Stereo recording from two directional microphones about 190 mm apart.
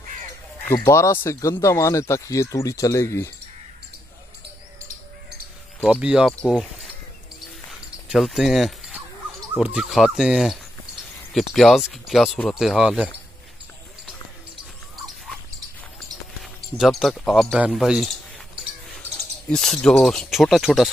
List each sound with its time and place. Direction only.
0.7 s speech: 15° left (ahead or behind)
5.9 s speech: 5° right (ahead or behind)
8.1 s speech: centre (ahead or behind)
16.7 s speech: centre (ahead or behind)
19.5 s speech: 5° left (ahead or behind)